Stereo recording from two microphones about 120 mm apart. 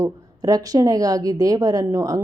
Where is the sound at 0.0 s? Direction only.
30° right (ahead or behind).